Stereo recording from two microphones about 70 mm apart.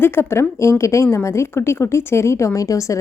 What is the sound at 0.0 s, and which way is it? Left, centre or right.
A woman's voice, left.